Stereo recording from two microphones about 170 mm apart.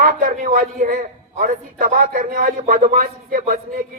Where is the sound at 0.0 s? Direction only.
55° right (ahead or behind).